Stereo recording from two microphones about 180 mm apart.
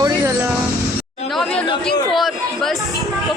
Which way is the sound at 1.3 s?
5° left (ahead or behind).